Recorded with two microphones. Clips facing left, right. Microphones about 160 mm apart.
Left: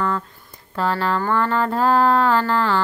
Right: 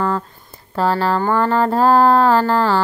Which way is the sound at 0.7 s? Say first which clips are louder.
Right 4 dB; 35° right (ahead or behind).